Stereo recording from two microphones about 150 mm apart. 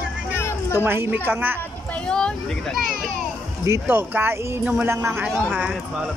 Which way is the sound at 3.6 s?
15° right (ahead or behind).